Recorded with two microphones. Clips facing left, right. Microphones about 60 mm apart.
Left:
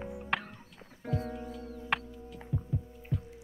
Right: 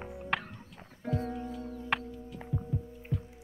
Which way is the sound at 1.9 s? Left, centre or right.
Centre.